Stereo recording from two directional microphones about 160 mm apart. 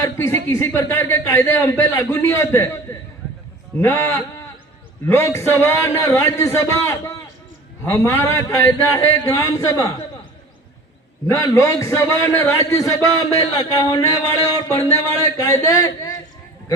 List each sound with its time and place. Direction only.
0.0 s a man's voice: 15° left (ahead or behind)
11.3 s a man's voice: 20° left (ahead or behind)